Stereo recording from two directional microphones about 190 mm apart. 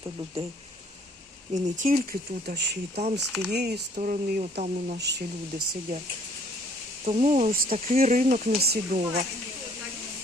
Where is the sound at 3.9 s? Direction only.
45° right (ahead or behind).